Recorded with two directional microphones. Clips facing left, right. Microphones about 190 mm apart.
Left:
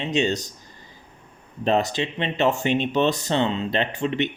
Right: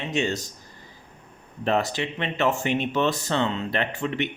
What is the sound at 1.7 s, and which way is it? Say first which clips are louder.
Speech: left 2 dB; 20° left (ahead or behind).